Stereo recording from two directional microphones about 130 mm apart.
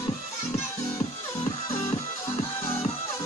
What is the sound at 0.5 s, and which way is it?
Music, 20° left (ahead or behind).